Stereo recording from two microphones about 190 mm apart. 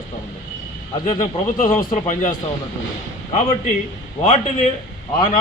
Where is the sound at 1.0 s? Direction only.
40° left (ahead or behind).